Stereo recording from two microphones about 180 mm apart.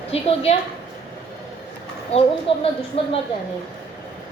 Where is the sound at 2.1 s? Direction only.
35° left (ahead or behind).